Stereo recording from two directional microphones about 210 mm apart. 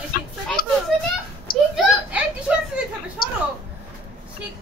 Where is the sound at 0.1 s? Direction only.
45° left (ahead or behind).